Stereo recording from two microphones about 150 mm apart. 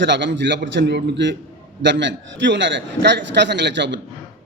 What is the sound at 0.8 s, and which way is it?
Speech, 90° right.